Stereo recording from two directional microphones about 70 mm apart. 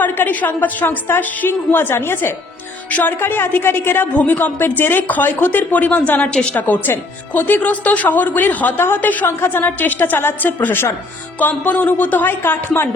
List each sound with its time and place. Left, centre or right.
0.0 s a woman's voice: left